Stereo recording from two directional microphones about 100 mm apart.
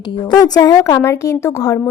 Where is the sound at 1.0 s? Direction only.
30° left (ahead or behind).